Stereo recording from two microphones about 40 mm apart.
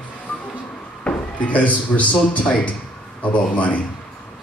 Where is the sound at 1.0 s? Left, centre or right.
Left.